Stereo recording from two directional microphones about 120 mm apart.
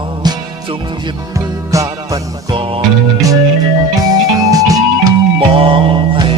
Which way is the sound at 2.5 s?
45° right (ahead or behind).